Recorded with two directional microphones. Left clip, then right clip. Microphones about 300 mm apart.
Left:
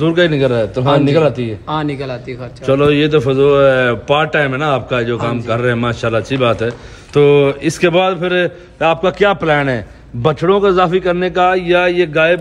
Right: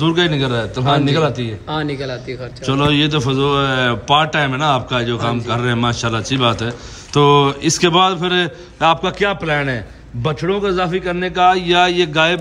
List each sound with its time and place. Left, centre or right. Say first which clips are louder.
0.0 s a man's voice: left 4 dB; centre
0.8 s a man's voice: left 2 dB; left
1.2 s a man's voice: left 4 dB; centre
1.7 s a man's voice: left 2 dB; left
2.6 s a man's voice: left 4 dB; centre